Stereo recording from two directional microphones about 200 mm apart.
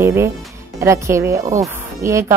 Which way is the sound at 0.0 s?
15° right (ahead or behind).